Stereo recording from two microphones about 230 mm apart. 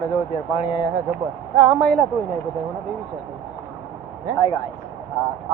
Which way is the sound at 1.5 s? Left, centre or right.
Centre.